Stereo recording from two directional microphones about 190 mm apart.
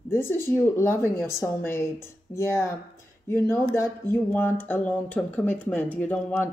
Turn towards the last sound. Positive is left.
turn(degrees=10)  # may be behind; listen again after turning